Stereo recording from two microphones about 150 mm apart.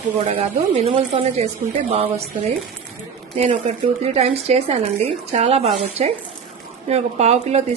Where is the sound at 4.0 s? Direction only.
45° right (ahead or behind).